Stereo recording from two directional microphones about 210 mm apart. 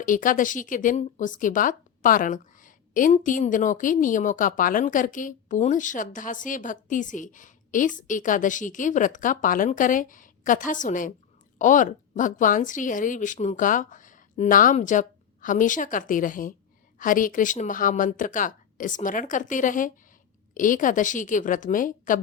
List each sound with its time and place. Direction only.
0.0 s speech: 40° left (ahead or behind)